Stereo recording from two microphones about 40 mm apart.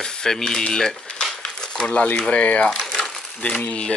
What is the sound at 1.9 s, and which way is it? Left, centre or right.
Speech, left.